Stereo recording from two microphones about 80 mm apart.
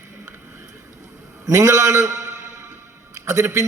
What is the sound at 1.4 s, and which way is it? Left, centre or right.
A man's voice, right.